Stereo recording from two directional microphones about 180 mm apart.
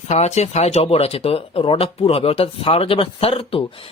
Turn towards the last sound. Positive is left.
turn(degrees=30)  # may be behind; listen again after turning